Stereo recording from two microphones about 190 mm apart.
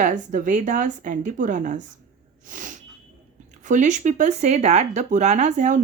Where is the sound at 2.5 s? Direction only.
45° right (ahead or behind).